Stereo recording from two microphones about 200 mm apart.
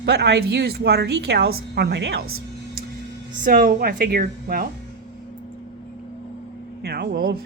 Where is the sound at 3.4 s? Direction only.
45° right (ahead or behind).